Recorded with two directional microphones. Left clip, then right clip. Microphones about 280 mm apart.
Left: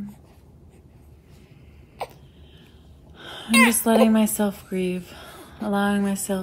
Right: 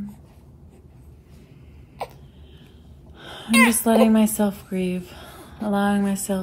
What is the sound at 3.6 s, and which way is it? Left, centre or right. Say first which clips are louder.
A woman's voice: right 1 dB; centre.